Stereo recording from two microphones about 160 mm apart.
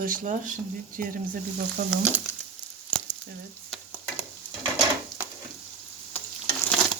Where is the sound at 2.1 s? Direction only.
10° right (ahead or behind).